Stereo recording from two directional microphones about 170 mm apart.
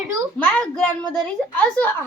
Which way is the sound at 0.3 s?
10° left (ahead or behind).